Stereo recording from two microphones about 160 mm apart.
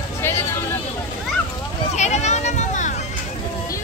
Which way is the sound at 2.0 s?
45° left (ahead or behind).